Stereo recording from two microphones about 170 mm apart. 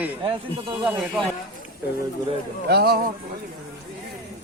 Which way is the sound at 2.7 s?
70° right (ahead or behind).